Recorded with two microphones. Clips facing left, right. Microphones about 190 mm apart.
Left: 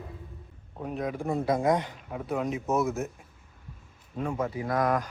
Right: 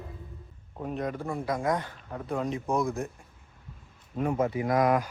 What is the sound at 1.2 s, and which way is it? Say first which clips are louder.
Speech: left 4 dB; 20° left (ahead or behind).